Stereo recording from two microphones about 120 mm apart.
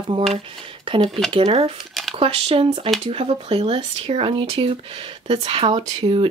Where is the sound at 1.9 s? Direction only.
Centre (ahead or behind).